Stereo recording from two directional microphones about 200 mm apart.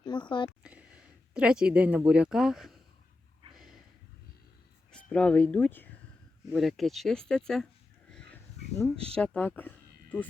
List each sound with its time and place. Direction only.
0.0 s speech: 20° left (ahead or behind)
0.6 s speech: 5° right (ahead or behind)
3.5 s snort: centre (ahead or behind)
4.9 s speech: 5° left (ahead or behind)
8.1 s a sound: 5° left (ahead or behind)
9.1 s speech: 5° left (ahead or behind)